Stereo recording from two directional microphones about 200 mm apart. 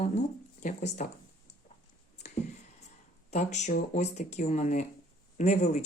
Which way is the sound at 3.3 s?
35° left (ahead or behind).